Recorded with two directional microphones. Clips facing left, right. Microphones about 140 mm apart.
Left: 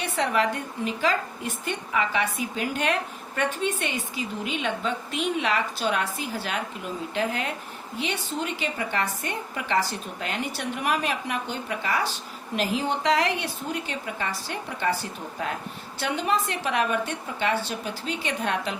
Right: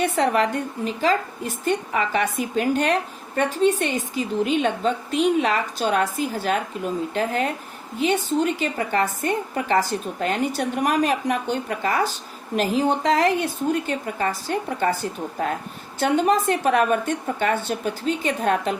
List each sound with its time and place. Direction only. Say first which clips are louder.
0.0 s a woman's voice: right 5 dB; 45° right (ahead or behind)
16.0 s a woman's voice: right 7 dB; 45° right (ahead or behind)